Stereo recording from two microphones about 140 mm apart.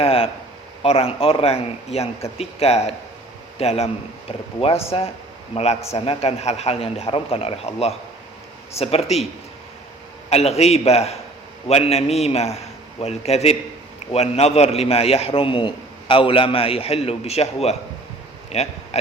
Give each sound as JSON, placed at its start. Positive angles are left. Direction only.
{"t": 0.0, "sound": "a man's voice", "side_deg": 45}
{"t": 10.2, "sound": "a man's voice", "side_deg": 50}